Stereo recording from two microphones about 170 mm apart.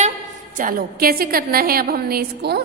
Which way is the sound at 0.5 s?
55° right (ahead or behind).